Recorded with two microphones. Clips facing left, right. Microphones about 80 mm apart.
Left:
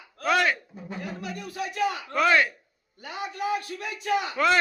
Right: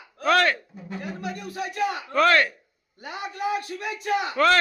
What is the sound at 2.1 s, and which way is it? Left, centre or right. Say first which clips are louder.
Speech: right 3 dB; centre.